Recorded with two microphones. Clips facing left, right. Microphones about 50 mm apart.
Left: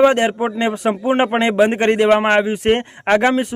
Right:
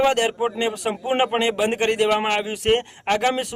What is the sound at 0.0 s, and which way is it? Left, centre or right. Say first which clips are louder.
Speech: left 5 dB; left.